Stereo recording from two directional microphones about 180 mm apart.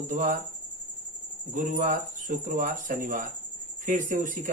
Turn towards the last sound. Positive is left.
turn(degrees=-50)  # may be behind; listen again after turning